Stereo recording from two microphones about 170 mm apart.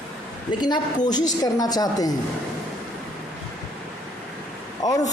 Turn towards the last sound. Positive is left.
turn(degrees=20)  # may be behind; listen again after turning